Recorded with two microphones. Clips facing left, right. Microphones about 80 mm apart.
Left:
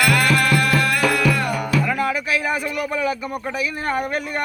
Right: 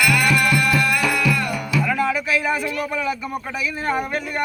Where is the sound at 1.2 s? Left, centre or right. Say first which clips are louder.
Left 2 dB; left.